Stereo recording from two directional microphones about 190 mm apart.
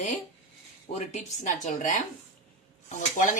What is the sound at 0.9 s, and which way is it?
A woman's voice, 40° left (ahead or behind).